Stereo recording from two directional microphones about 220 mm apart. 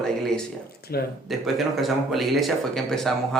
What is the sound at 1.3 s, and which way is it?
A man's voice, centre (ahead or behind).